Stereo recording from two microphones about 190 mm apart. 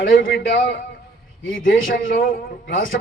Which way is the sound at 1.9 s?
45° left (ahead or behind).